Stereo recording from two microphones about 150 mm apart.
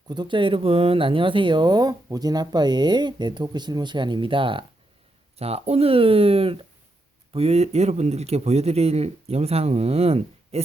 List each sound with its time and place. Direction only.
0.1 s speech: 30° right (ahead or behind)